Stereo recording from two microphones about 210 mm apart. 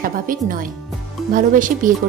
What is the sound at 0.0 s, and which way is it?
Speech, 40° right (ahead or behind).